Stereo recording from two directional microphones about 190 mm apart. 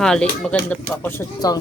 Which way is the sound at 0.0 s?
5° left (ahead or behind).